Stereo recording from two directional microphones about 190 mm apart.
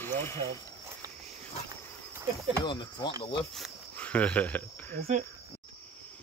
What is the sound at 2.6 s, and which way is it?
Speech, 25° left (ahead or behind).